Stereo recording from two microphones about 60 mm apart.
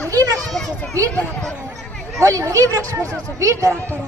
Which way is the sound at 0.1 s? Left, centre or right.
Right.